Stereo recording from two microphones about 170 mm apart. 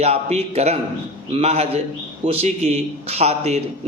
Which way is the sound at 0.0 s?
40° right (ahead or behind).